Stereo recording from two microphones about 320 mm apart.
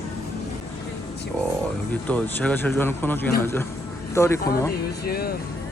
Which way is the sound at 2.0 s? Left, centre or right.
Centre.